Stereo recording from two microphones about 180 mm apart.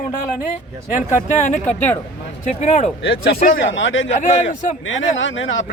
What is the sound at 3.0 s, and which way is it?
Speech, 55° left (ahead or behind).